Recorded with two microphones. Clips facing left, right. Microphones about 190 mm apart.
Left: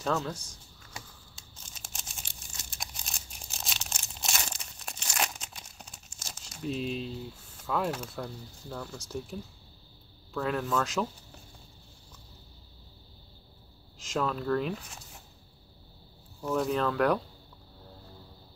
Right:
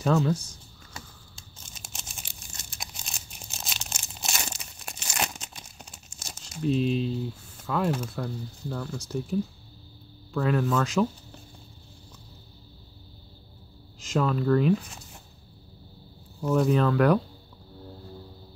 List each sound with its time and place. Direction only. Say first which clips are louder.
0.0 s speech: right 7 dB; 5° right (ahead or behind)
1.0 s a sound: right 2 dB; 15° left (ahead or behind)
2.8 s crumpling: right 1 dB; centre (ahead or behind)
7.6 s speech: right 4 dB; centre (ahead or behind)
13.9 s speech: right 5 dB; centre (ahead or behind)
16.3 s speech: right 6 dB; 5° right (ahead or behind)